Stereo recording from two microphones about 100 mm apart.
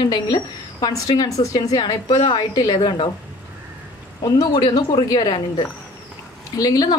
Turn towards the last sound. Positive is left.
turn(degrees=40)  # may be behind; listen again after turning